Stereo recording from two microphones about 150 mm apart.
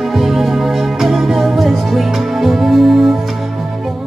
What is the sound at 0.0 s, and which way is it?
Music, centre (ahead or behind).